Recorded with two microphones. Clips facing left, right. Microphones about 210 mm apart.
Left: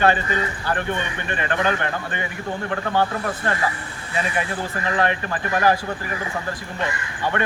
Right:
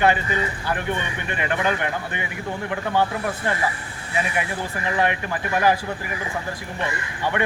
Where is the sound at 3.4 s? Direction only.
15° right (ahead or behind).